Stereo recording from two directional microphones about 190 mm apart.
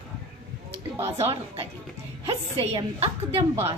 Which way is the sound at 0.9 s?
15° right (ahead or behind).